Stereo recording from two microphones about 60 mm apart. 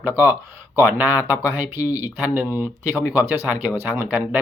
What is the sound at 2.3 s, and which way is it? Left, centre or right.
Speech, right.